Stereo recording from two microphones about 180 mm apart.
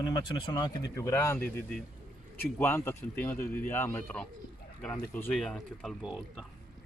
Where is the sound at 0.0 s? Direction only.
25° left (ahead or behind).